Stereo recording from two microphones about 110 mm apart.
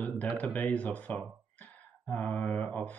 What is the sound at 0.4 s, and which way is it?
Speech, 15° left (ahead or behind).